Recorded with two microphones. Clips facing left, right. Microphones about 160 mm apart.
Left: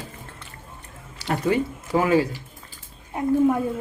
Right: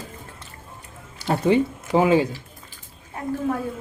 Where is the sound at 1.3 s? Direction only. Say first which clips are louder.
Right 3 dB; 20° right (ahead or behind).